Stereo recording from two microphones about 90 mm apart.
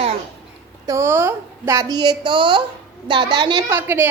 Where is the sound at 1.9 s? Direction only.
55° right (ahead or behind).